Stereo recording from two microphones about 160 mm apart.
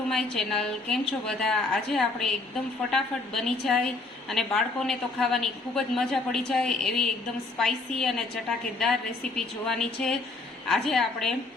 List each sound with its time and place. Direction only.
0.1 s a woman's voice: 5° left (ahead or behind)